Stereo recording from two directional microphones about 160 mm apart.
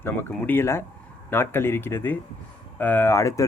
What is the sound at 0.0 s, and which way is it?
Speech, 15° left (ahead or behind).